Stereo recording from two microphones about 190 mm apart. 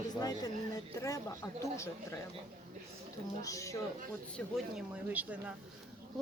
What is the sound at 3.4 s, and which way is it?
Speech, 15° left (ahead or behind).